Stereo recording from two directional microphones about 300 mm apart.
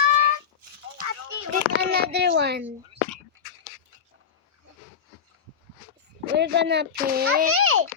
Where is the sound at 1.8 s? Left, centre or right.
Right.